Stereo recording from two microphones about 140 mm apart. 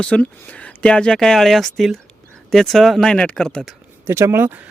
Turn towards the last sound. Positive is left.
turn(degrees=-15)  # may be behind; listen again after turning